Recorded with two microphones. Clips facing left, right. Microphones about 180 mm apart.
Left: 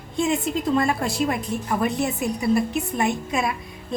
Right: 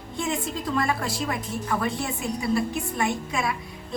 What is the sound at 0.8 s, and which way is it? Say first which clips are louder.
Speech: left 4 dB; 25° left (ahead or behind).